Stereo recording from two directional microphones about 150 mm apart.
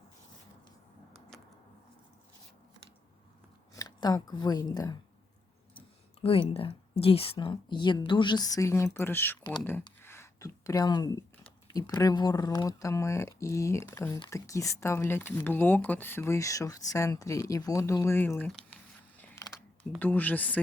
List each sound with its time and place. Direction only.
3.8 s speech: 25° left (ahead or behind)
6.2 s a woman's voice: 40° left (ahead or behind); by 9.4 s 15° left (ahead or behind)
9.4 s speech: 30° left (ahead or behind)
10.0 s a sound: 15° left (ahead or behind)
11.9 s speech: 25° left (ahead or behind)
18.4 s speech: 5° left (ahead or behind)
19.4 s a sound: 20° left (ahead or behind)
20.0 s speech: 10° left (ahead or behind)